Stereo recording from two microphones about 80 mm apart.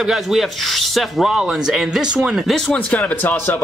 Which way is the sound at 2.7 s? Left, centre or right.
Centre.